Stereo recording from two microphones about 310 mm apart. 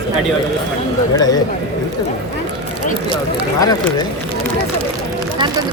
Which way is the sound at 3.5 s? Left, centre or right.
Centre.